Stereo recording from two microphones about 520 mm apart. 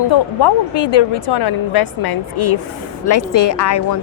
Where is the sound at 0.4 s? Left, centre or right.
Left.